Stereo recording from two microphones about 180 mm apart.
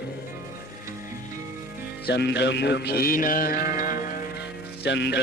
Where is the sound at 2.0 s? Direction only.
70° left (ahead or behind); by 4.0 s 50° left (ahead or behind).